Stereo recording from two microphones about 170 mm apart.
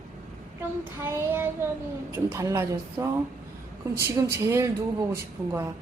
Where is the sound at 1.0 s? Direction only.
15° right (ahead or behind).